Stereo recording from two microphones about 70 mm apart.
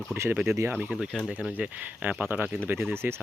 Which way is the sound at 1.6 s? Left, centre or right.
Right.